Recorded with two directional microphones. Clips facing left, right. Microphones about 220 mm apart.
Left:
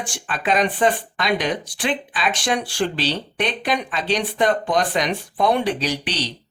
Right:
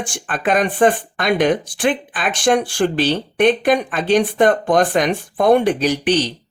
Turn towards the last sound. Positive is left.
turn(degrees=-50)  # may be behind; listen again after turning